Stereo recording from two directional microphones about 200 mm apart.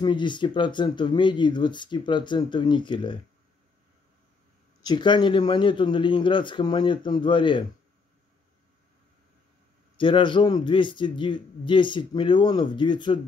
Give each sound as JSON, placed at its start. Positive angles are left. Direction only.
{"t": 0.0, "sound": "a man's voice", "side_deg": 25}
{"t": 4.8, "sound": "a man's voice", "side_deg": 25}
{"t": 9.9, "sound": "a man's voice", "side_deg": 25}